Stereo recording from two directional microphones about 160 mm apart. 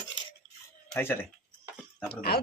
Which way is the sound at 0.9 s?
15° left (ahead or behind).